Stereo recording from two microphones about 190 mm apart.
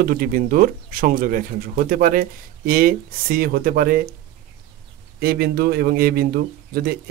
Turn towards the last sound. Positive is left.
turn(degrees=-55)  # may be behind; listen again after turning